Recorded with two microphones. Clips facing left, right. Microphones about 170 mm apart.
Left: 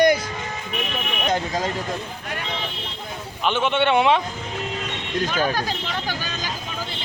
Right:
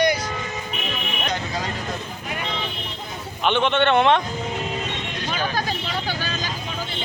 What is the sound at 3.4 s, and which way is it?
Speech, 5° left (ahead or behind).